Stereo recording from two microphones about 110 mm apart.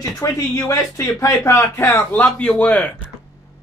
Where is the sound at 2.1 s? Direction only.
10° left (ahead or behind).